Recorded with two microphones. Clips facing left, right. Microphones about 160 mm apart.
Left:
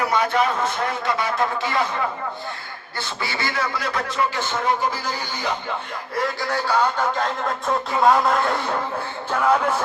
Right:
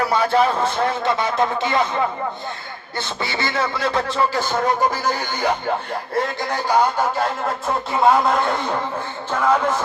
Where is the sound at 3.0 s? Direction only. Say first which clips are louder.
Right 2 dB; 25° right (ahead or behind); by 5.7 s 50° right (ahead or behind).